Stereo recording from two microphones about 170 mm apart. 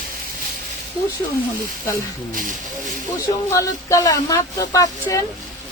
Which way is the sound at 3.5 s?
20° left (ahead or behind).